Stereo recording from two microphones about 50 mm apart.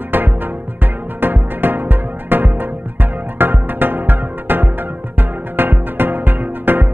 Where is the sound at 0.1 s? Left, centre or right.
Right.